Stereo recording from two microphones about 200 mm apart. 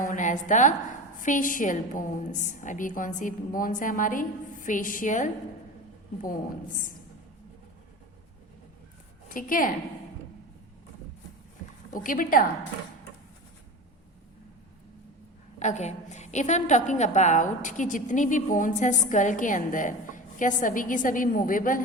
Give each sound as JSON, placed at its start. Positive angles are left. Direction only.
{"t": 0.0, "sound": "a woman's voice", "side_deg": 40}
{"t": 9.3, "sound": "a woman's voice", "side_deg": 45}
{"t": 11.9, "sound": "a woman's voice", "side_deg": 45}
{"t": 15.5, "sound": "a woman's voice", "side_deg": 35}